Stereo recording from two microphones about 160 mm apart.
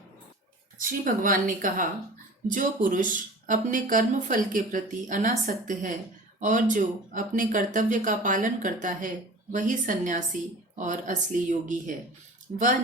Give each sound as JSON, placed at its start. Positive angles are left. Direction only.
{"t": 0.8, "sound": "speech", "side_deg": -60}